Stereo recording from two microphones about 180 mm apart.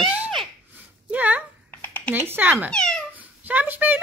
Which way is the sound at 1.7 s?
10° left (ahead or behind).